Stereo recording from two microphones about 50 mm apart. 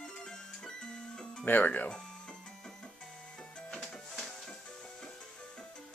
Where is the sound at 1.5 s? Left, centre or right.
Left.